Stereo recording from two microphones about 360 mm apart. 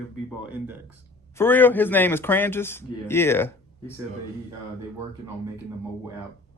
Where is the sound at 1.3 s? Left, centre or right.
Centre.